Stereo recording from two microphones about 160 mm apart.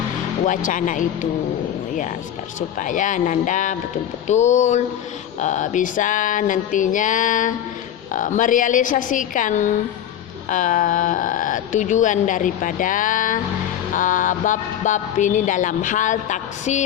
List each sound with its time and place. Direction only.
0.4 s speech: 55° left (ahead or behind)
2.6 s music: 55° left (ahead or behind)
8.1 s speech: 55° left (ahead or behind)
13.9 s music: 55° left (ahead or behind)